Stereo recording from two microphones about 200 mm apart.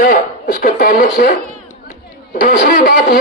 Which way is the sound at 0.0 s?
40° left (ahead or behind).